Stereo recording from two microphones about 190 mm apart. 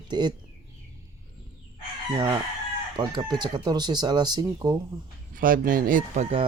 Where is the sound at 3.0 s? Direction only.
20° right (ahead or behind).